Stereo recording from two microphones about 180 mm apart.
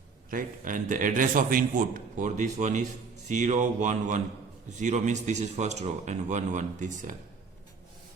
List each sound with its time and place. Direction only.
0.3 s a man's voice: 50° right (ahead or behind)